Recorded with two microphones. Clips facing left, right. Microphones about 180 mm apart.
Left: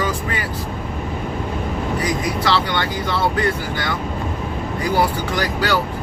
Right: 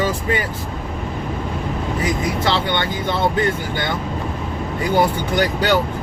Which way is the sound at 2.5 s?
25° right (ahead or behind).